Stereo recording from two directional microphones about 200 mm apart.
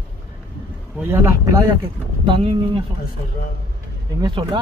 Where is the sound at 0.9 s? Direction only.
15° right (ahead or behind).